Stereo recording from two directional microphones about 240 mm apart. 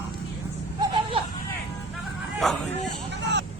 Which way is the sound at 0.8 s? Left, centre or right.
Centre.